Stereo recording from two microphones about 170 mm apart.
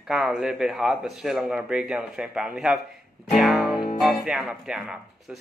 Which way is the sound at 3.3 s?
Centre (ahead or behind).